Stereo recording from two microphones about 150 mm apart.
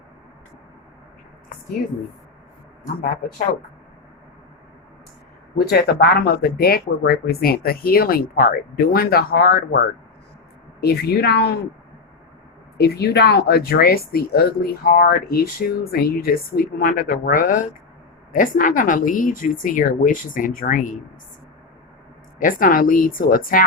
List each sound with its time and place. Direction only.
5.5 s speech: 90° left
10.8 s speech: 90° left
12.7 s speech: 90° left; by 20.9 s 60° left (ahead or behind)
22.4 s speech: 65° left (ahead or behind)